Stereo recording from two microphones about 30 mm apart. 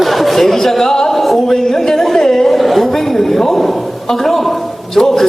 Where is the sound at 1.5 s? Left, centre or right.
Centre.